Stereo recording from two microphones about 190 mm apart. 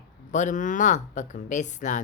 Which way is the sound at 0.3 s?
40° left (ahead or behind).